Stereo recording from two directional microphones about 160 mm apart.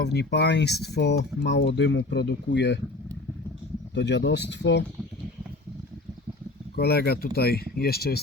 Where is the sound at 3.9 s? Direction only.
90° left.